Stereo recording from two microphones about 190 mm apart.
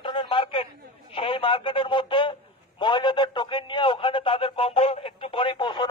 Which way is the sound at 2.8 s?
25° left (ahead or behind).